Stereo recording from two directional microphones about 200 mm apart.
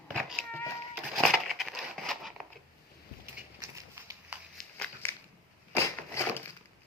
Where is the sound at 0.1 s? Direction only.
Centre (ahead or behind).